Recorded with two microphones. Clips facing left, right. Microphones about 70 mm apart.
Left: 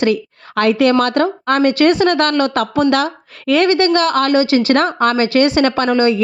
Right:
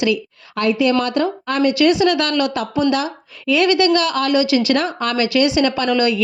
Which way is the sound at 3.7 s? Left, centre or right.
Left.